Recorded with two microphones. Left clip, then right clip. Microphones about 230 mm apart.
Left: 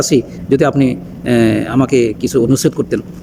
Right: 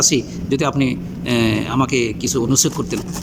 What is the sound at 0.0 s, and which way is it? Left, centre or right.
Speech, centre.